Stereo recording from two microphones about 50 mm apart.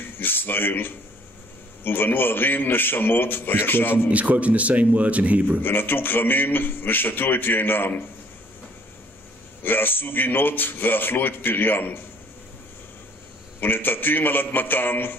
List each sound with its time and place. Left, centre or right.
0.2 s a man's voice: left
4.1 s speech: right
5.6 s a man's voice: left
9.6 s a man's voice: left
13.6 s a man's voice: left